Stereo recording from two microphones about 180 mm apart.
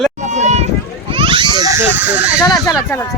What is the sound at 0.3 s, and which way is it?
Run, 40° right (ahead or behind).